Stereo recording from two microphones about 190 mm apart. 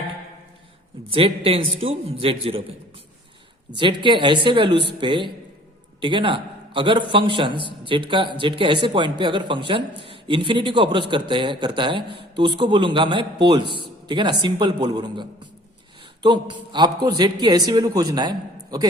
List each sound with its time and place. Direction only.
1.5 s a man's voice: 30° right (ahead or behind)
3.7 s a man's voice: 25° right (ahead or behind)